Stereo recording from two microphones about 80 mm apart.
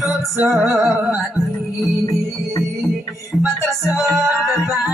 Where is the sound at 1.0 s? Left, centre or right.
Centre.